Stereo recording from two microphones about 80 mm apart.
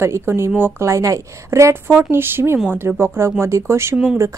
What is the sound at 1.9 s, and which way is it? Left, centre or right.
A woman's voice, right.